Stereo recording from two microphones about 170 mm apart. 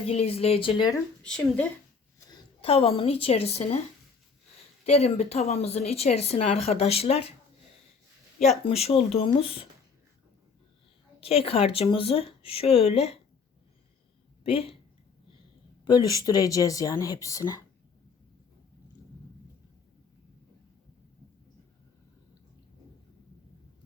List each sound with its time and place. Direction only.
0.0 s speech: 35° left (ahead or behind)
1.2 s speech: 5° left (ahead or behind)
2.6 s speech: 35° left (ahead or behind)
4.9 s speech: 35° left (ahead or behind)
8.4 s speech: 40° left (ahead or behind)
11.2 s speech: 35° left (ahead or behind)
14.4 s speech: 35° left (ahead or behind)
16.2 s speech: 20° left (ahead or behind)